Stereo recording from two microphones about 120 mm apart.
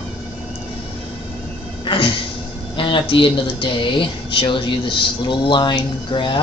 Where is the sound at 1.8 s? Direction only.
45° left (ahead or behind).